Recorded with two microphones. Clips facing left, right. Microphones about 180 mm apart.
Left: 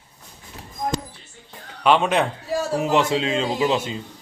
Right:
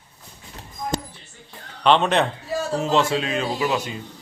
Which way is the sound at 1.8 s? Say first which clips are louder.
Even; 10° left (ahead or behind).